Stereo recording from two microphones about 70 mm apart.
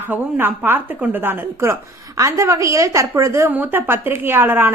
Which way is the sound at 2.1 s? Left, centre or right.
Right.